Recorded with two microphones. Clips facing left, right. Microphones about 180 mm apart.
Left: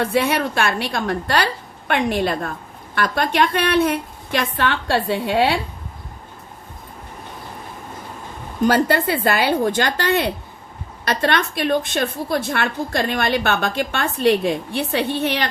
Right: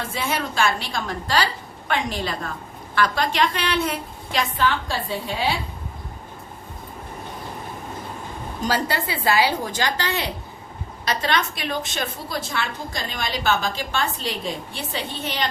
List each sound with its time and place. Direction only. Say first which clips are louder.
0.0 s a woman's voice: left 8 dB; 65° left (ahead or behind)
8.6 s a woman's voice: left 8 dB; 55° left (ahead or behind)